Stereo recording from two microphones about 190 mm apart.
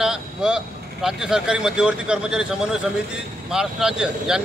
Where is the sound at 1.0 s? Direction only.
5° right (ahead or behind).